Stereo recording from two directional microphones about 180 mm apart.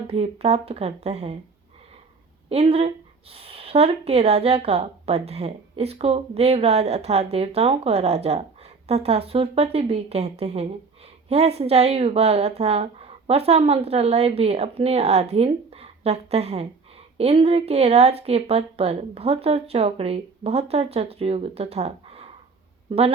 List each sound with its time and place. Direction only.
0.1 s a woman's voice: 35° right (ahead or behind)
2.5 s a woman's voice: 35° right (ahead or behind)